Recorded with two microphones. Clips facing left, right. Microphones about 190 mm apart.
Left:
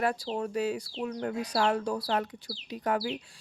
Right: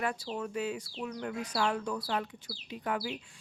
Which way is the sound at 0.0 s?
35° left (ahead or behind).